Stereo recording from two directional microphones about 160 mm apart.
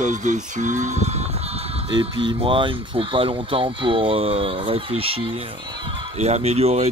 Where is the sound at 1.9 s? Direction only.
30° right (ahead or behind).